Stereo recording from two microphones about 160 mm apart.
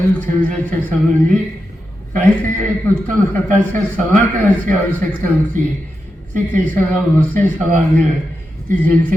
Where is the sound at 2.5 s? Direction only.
55° right (ahead or behind).